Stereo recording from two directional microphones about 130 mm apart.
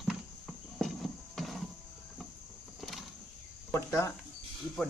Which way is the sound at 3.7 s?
20° left (ahead or behind).